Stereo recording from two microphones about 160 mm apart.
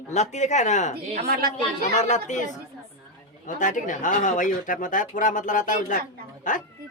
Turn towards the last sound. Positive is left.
turn(degrees=55)  # may be behind; listen again after turning